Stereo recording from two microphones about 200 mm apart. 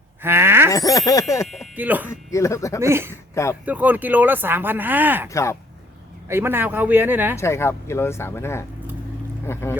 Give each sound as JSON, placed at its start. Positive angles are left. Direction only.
{"t": 0.2, "sound": "a sound", "side_deg": -10}
{"t": 0.7, "sound": "speech", "side_deg": 15}
{"t": 1.5, "sound": "speech", "side_deg": -5}
{"t": 2.3, "sound": "speech", "side_deg": 15}
{"t": 2.8, "sound": "speech", "side_deg": -10}
{"t": 3.4, "sound": "speech", "side_deg": 15}
{"t": 3.7, "sound": "speech", "side_deg": -10}
{"t": 5.3, "sound": "speech", "side_deg": 15}
{"t": 6.2, "sound": "speech", "side_deg": -10}
{"t": 7.3, "sound": "speech", "side_deg": 15}